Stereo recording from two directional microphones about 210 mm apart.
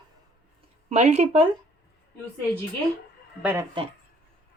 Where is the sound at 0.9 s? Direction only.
30° right (ahead or behind).